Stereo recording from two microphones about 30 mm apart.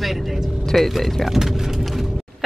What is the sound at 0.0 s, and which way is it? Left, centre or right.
A woman's voice, centre.